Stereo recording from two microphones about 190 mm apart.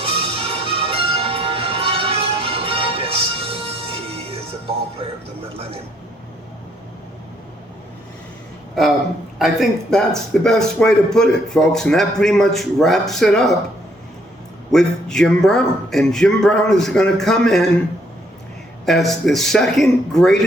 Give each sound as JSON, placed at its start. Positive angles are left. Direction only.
{"t": 0.0, "sound": "music", "side_deg": -30}
{"t": 9.4, "sound": "speech", "side_deg": 0}
{"t": 14.7, "sound": "speech", "side_deg": 5}
{"t": 18.9, "sound": "speech", "side_deg": 0}